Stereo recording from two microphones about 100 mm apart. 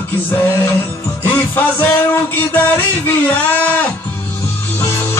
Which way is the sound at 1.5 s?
20° left (ahead or behind).